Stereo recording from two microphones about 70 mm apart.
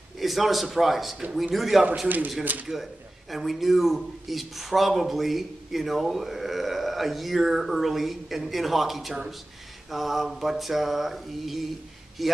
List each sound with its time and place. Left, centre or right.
0.2 s a man's voice: centre
2.0 s speech: right
2.6 s a man's voice: centre